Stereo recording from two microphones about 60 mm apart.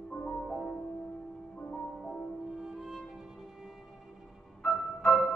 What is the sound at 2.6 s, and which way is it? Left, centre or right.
Music, centre.